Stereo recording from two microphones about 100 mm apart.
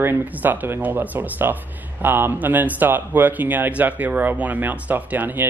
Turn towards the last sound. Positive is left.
turn(degrees=-20)  # may be behind; listen again after turning